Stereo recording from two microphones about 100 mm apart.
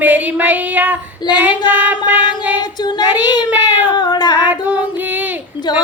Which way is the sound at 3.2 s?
45° left (ahead or behind).